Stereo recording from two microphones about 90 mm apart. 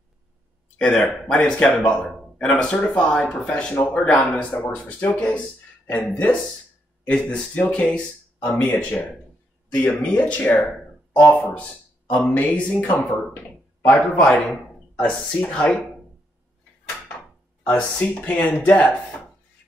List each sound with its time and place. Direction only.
0.7 s speech: 15° left (ahead or behind)
3.7 s speech: 25° left (ahead or behind)
4.0 s speech: 15° left (ahead or behind)
17.7 s speech: 15° left (ahead or behind)